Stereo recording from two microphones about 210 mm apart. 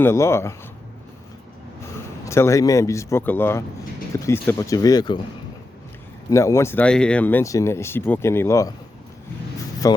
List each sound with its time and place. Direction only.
0.0 s speech: 10° left (ahead or behind)
2.2 s speech: 15° left (ahead or behind)
6.3 s speech: 15° left (ahead or behind)
9.8 s speech: 15° left (ahead or behind)